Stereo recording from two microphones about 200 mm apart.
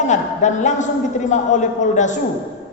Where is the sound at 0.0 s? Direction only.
35° left (ahead or behind).